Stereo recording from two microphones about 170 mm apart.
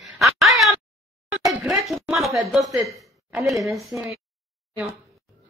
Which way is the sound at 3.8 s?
Centre (ahead or behind).